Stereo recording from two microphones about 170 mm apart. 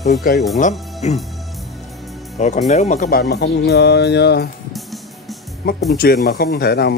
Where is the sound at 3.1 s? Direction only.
75° left (ahead or behind).